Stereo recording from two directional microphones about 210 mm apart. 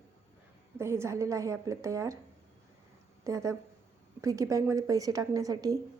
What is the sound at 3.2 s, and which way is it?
A woman's voice, 15° right (ahead or behind).